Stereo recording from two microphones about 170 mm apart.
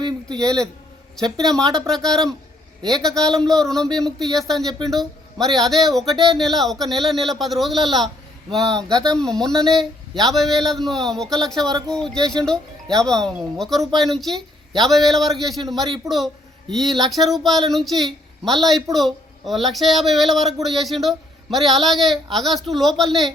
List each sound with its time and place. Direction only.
0.3 s speech: 5° left (ahead or behind)